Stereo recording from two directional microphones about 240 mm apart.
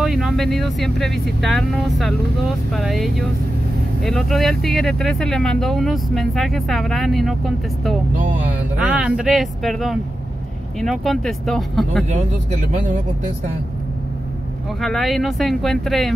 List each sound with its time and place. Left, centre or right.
0.0 s speech: centre
12.7 s speech: right
14.8 s speech: centre